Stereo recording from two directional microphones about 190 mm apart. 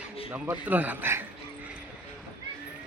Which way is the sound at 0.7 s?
10° right (ahead or behind).